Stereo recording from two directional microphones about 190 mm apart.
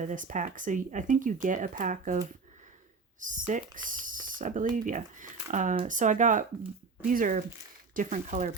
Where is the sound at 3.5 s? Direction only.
45° right (ahead or behind).